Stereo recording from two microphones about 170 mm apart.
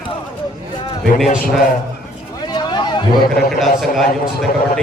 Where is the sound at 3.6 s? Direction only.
Centre (ahead or behind).